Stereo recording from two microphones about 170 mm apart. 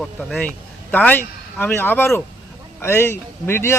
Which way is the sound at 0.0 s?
5° left (ahead or behind).